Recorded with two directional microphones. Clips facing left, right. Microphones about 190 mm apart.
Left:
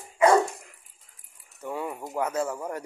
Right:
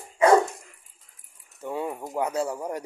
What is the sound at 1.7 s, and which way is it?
Speech, 20° right (ahead or behind).